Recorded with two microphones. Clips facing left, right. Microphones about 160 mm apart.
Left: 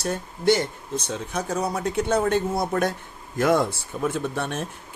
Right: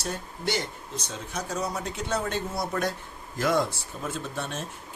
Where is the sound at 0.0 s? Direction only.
50° left (ahead or behind).